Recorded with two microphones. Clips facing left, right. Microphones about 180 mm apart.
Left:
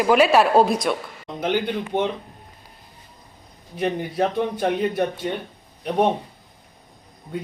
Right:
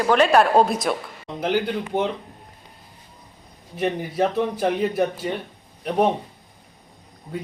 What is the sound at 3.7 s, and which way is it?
Speech, 5° right (ahead or behind).